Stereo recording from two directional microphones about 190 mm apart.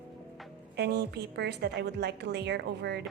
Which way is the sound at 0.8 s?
55° right (ahead or behind).